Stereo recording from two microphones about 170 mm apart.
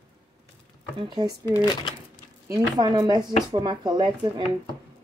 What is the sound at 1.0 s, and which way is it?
Speech, 25° right (ahead or behind).